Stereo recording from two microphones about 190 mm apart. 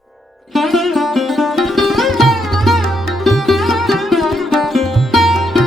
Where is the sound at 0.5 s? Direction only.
Centre (ahead or behind).